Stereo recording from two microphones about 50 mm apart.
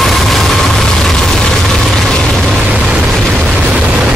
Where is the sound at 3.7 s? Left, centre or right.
Centre.